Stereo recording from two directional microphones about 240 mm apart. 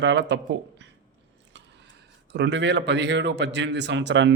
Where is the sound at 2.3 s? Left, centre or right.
Right.